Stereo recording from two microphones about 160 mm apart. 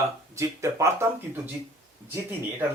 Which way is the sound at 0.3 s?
20° right (ahead or behind).